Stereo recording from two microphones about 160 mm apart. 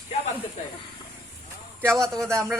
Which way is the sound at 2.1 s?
5° left (ahead or behind).